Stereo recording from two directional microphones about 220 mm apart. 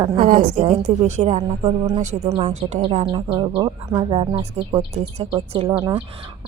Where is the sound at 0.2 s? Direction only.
40° right (ahead or behind).